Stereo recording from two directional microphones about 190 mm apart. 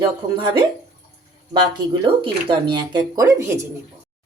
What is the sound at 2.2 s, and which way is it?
A woman's voice, 25° right (ahead or behind).